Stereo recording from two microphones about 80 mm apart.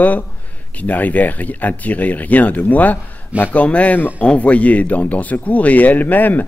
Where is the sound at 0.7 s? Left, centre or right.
Left.